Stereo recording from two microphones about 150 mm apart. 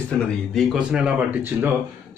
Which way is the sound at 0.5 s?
Centre (ahead or behind).